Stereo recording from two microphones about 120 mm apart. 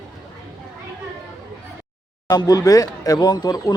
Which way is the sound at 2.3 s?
30° left (ahead or behind).